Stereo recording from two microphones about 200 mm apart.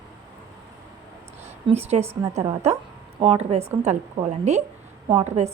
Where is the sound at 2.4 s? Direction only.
30° right (ahead or behind).